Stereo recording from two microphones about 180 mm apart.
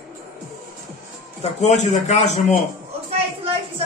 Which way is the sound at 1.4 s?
40° left (ahead or behind).